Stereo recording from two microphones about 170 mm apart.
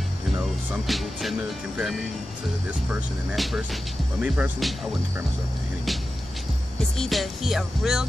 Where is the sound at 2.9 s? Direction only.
5° right (ahead or behind).